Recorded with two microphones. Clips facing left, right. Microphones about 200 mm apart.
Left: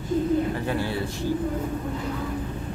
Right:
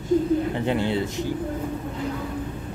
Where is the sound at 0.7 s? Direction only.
20° right (ahead or behind).